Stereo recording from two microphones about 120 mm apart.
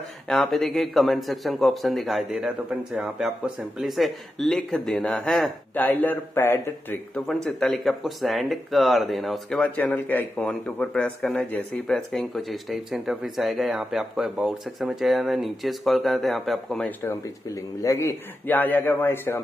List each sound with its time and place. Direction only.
0.3 s speech: centre (ahead or behind)
5.8 s a man's voice: 15° left (ahead or behind)
7.4 s speech: centre (ahead or behind)
17.8 s a man's voice: 25° left (ahead or behind)